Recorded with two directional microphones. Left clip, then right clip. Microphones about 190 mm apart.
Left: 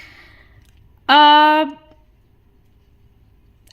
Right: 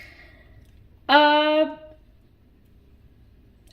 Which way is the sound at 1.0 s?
35° left (ahead or behind).